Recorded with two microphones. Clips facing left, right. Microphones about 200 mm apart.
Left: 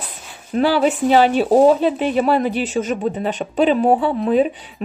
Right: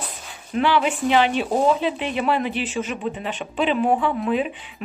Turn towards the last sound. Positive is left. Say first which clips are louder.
# left 6 dB
turn(degrees=40)  # may be behind; listen again after turning